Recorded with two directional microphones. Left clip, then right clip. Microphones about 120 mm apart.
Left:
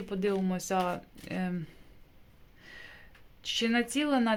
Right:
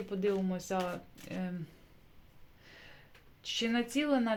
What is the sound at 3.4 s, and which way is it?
Speech, 25° left (ahead or behind).